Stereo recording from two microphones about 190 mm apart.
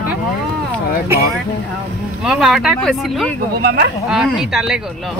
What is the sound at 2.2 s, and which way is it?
Speech, 5° right (ahead or behind).